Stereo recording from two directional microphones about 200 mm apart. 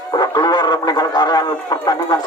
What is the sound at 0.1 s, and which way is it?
Speech, 20° left (ahead or behind).